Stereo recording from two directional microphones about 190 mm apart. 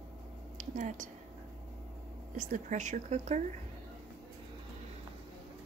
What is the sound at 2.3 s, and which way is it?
A woman's voice, 40° right (ahead or behind).